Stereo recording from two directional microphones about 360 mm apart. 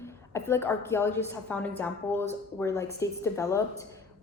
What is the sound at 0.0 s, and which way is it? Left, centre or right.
A woman's voice, centre.